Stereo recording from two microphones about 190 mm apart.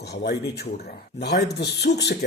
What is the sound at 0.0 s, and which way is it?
Speech, 60° left (ahead or behind).